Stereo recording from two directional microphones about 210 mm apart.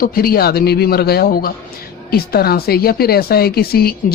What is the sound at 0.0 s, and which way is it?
Speech, 45° left (ahead or behind).